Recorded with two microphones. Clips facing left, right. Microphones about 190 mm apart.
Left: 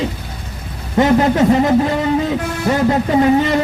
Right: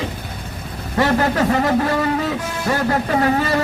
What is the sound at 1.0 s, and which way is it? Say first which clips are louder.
Speech: left 5 dB; 20° left (ahead or behind).